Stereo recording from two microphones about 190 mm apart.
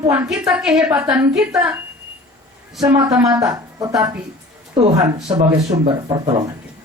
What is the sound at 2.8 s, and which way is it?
A woman's voice, 20° right (ahead or behind).